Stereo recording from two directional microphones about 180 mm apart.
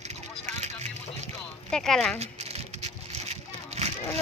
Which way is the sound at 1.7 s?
5° left (ahead or behind).